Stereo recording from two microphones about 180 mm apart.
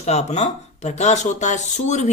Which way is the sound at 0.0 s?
40° left (ahead or behind).